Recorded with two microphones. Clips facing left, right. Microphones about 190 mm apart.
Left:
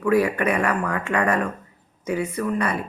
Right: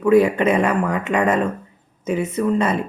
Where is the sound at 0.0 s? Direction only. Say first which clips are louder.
Right 5 dB; 25° right (ahead or behind).